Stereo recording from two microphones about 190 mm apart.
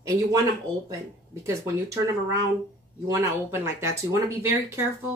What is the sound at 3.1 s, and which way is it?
Speech, 15° right (ahead or behind).